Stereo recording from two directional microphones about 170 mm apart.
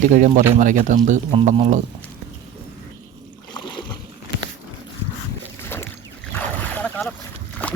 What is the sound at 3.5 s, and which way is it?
Boat, 25° left (ahead or behind).